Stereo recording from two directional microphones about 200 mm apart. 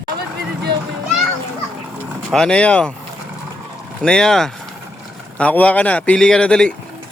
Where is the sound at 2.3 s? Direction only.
5° left (ahead or behind).